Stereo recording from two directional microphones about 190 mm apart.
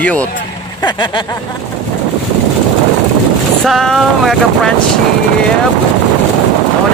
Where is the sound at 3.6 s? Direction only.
Centre (ahead or behind).